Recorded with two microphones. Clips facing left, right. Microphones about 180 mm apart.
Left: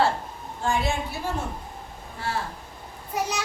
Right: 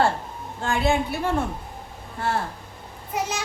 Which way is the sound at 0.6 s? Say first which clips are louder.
Right 3 dB; 60° right (ahead or behind).